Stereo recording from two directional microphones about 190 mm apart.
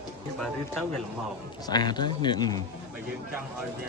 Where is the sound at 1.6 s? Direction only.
20° left (ahead or behind).